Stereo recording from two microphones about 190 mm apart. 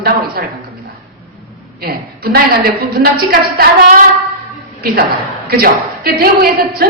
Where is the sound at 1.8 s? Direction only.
55° right (ahead or behind).